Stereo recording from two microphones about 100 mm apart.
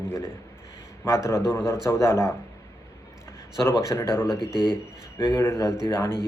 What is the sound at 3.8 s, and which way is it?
A man's voice, 30° left (ahead or behind).